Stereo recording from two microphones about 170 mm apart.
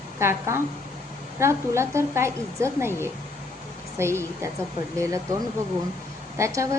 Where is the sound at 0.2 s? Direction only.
15° right (ahead or behind).